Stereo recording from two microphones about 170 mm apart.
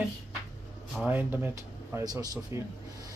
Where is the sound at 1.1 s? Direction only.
10° right (ahead or behind).